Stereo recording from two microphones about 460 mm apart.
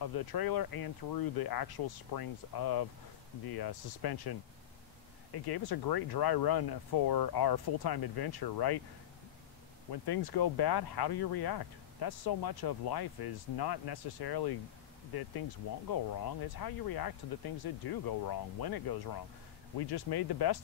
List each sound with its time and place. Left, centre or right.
0.0 s speech: left
9.8 s speech: left